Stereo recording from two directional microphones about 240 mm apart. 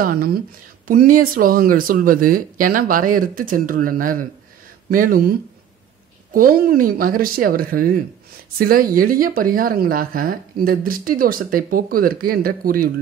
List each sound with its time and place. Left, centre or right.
0.0 s a woman's voice: right
6.3 s a woman's voice: right